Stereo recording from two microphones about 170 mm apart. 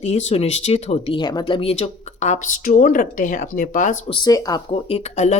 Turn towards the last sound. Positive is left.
turn(degrees=40)  # may be behind; listen again after turning